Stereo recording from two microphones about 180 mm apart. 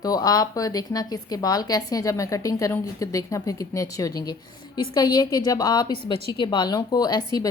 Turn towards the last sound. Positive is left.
turn(degrees=20)  # may be behind; listen again after turning